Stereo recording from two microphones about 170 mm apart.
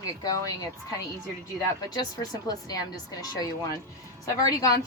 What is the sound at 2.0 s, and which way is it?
Speech, 20° left (ahead or behind).